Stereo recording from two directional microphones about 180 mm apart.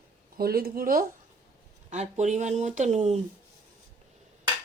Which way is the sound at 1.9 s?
40° right (ahead or behind).